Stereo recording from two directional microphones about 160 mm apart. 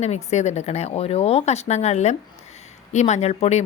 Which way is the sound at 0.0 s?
45° left (ahead or behind).